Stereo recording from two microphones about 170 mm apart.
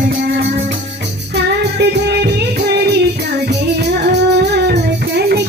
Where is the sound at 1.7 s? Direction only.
75° right (ahead or behind).